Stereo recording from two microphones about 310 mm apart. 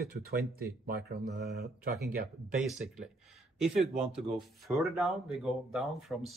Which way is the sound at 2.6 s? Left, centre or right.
Centre.